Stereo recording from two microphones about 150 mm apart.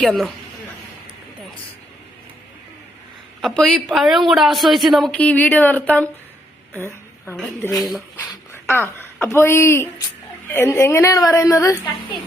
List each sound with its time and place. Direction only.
0.0 s speech: centre (ahead or behind)
3.4 s speech: 5° left (ahead or behind)
6.7 s a sound: 15° left (ahead or behind)
7.8 s speech: centre (ahead or behind)
8.1 s a sound: 15° left (ahead or behind)
9.2 s a woman's voice: 15° left (ahead or behind)